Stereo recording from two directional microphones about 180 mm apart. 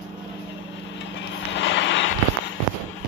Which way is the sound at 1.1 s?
90° left.